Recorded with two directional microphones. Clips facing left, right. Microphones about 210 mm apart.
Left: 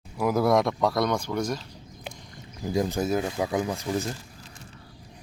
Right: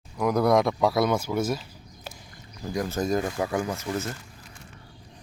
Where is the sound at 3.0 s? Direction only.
5° left (ahead or behind).